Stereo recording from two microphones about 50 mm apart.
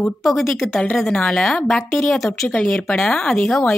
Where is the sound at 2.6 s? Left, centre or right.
Left.